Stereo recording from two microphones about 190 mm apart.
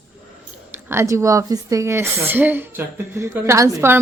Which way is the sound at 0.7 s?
15° right (ahead or behind).